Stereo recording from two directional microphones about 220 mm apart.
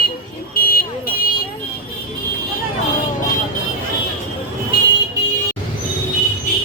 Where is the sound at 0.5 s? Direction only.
45° left (ahead or behind).